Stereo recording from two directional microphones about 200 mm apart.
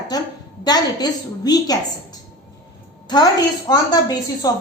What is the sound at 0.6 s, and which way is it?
A woman's voice, 20° left (ahead or behind).